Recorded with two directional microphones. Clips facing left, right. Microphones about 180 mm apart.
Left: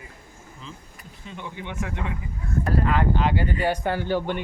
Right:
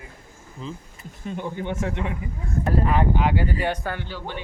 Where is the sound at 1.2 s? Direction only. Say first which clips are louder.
Right 7 dB; 45° right (ahead or behind).